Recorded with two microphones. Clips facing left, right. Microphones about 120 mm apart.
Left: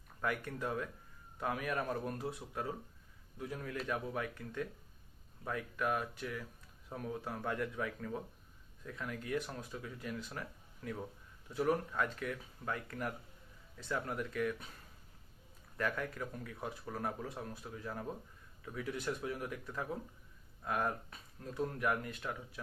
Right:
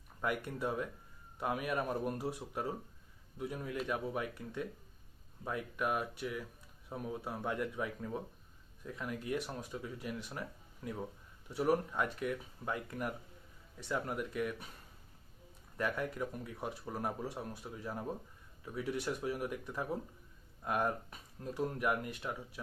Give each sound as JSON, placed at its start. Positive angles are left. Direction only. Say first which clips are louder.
{"t": 0.2, "sound": "speech", "louder": "right 1 dB", "side_deg": -15}
{"t": 15.8, "sound": "speech", "louder": "right 2 dB", "side_deg": -15}